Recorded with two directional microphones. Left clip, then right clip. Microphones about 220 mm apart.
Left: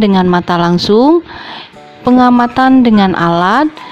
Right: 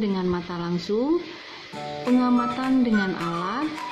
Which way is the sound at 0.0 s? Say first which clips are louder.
Left 16 dB; 45° left (ahead or behind).